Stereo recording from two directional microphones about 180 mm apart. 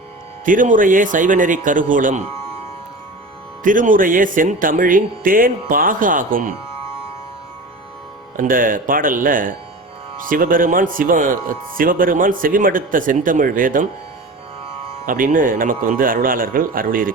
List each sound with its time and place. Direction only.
0.4 s speech: 45° right (ahead or behind)
3.6 s speech: 50° right (ahead or behind)
8.4 s speech: 50° right (ahead or behind)
15.0 s speech: 50° right (ahead or behind)